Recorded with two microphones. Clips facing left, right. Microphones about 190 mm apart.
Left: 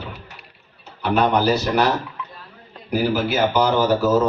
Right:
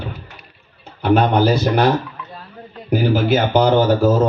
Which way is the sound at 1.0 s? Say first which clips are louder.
Right 4 dB; 50° right (ahead or behind).